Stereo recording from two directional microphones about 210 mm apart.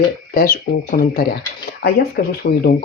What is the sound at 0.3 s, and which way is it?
Speech, 40° left (ahead or behind).